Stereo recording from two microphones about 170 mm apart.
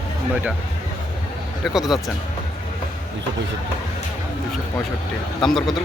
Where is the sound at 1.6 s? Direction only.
Centre (ahead or behind).